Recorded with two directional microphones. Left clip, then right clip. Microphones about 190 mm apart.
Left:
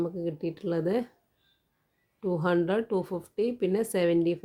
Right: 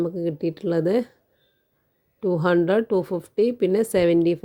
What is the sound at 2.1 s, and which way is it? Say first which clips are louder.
A woman's voice: right 7 dB; 35° right (ahead or behind).